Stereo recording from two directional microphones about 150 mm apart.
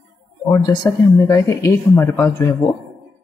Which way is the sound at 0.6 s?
25° left (ahead or behind).